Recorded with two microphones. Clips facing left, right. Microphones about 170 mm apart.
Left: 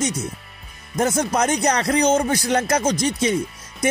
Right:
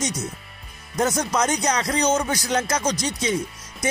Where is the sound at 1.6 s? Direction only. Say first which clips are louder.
Left 4 dB; 60° left (ahead or behind).